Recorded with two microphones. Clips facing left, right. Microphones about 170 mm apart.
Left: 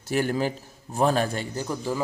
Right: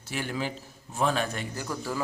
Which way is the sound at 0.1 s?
45° left (ahead or behind).